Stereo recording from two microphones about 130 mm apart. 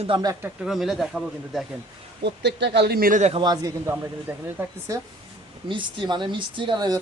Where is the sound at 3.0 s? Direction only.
80° right.